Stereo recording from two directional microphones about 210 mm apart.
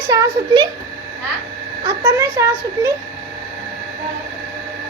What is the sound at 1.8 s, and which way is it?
A woman's voice, 15° right (ahead or behind).